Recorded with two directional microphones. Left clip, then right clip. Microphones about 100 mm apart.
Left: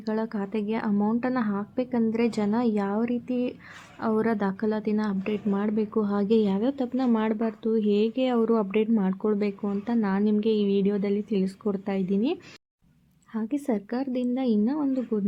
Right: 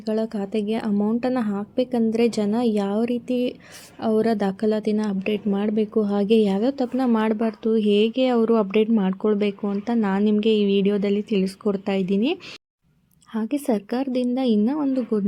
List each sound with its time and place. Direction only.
0.0 s speech: 25° right (ahead or behind)